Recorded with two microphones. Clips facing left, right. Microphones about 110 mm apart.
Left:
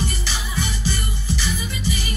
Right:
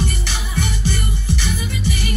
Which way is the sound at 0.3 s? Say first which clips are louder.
Right 2 dB; 60° right (ahead or behind).